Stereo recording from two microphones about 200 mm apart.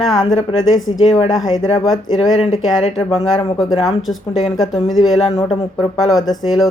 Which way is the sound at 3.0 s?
30° left (ahead or behind).